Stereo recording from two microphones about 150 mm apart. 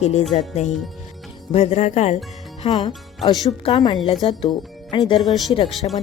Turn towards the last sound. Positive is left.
turn(degrees=35)  # may be behind; listen again after turning